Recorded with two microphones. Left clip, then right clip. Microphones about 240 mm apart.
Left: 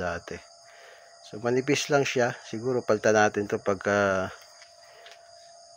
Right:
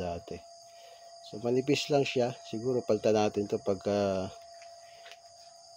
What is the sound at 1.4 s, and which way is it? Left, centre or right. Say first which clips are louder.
Speech: left 3 dB; centre.